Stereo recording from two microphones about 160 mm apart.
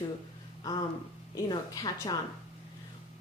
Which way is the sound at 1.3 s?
25° left (ahead or behind).